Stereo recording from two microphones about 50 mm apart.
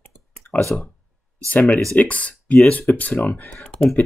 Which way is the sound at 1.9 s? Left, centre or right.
Left.